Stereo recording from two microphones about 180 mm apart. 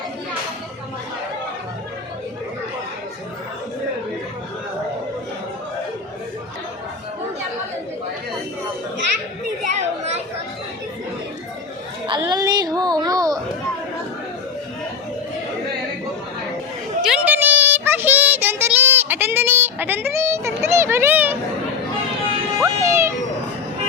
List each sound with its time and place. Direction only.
9.6 s children playing: 35° right (ahead or behind)
12.2 s a sound: 20° right (ahead or behind)
17.0 s child singing: 5° right (ahead or behind)
22.6 s music: 15° right (ahead or behind)